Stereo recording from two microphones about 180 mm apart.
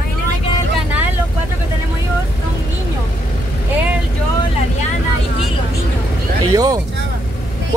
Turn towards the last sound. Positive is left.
turn(degrees=-20)  # may be behind; listen again after turning